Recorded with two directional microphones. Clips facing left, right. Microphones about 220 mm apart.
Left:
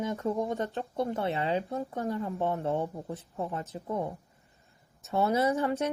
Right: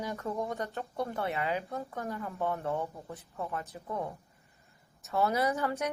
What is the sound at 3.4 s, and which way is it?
Speech, 15° left (ahead or behind).